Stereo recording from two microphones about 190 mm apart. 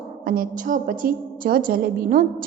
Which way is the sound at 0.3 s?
45° right (ahead or behind).